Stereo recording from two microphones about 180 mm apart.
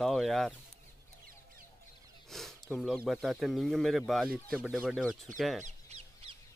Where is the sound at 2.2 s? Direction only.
Centre (ahead or behind).